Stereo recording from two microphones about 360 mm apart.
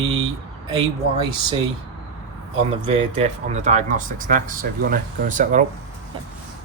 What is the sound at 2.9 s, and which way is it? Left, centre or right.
Speech, centre.